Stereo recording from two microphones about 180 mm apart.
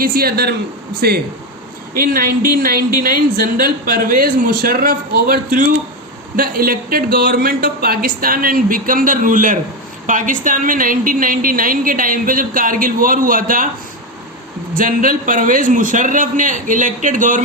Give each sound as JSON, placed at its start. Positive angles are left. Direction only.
{"t": 0.0, "sound": "a man's voice", "side_deg": -55}
{"t": 14.7, "sound": "a woman's voice", "side_deg": -50}